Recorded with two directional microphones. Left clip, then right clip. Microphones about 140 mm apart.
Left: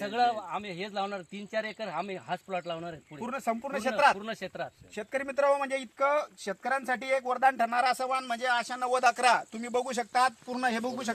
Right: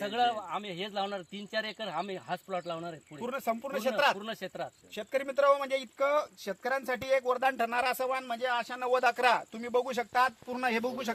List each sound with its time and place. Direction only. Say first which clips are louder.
0.0 s a man's voice: left 2 dB; 15° left (ahead or behind)
3.2 s speech: left 1 dB; 40° right (ahead or behind)
4.2 s speech: left 1 dB; 20° left (ahead or behind)
4.9 s speech: even; 35° right (ahead or behind)